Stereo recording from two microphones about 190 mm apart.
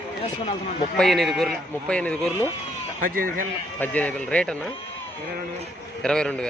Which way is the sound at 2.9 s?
50° right (ahead or behind).